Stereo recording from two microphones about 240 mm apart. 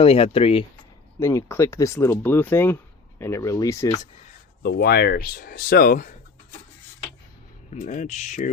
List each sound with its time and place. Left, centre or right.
0.0 s speech: left
1.2 s speech: centre
4.6 s speech: left
7.7 s speech: left